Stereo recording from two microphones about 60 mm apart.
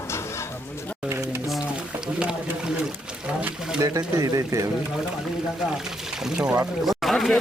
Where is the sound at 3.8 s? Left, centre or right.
Right.